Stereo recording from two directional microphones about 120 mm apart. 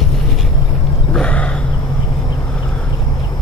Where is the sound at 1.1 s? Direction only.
10° left (ahead or behind).